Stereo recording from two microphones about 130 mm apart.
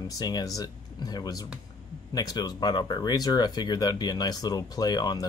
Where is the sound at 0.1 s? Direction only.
30° left (ahead or behind).